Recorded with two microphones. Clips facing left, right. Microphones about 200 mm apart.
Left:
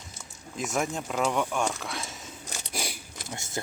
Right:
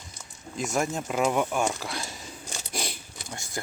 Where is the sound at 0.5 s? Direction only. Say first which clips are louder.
Right 2 dB; centre (ahead or behind).